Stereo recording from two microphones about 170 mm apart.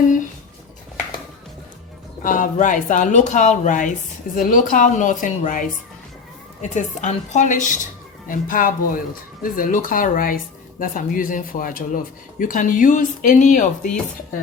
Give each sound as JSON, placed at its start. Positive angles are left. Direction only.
{"t": 2.2, "sound": "speech", "side_deg": 50}